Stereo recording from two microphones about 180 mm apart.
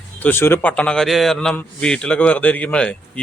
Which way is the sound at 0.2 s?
10° left (ahead or behind).